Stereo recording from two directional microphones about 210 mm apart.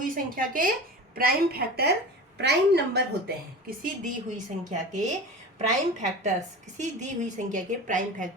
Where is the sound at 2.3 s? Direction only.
55° right (ahead or behind).